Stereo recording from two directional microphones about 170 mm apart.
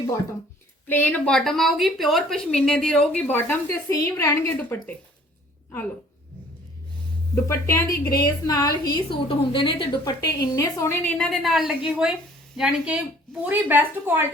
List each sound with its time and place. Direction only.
0.9 s a woman's voice: 10° left (ahead or behind)
7.4 s a woman's voice: 15° left (ahead or behind); by 14.3 s 10° right (ahead or behind)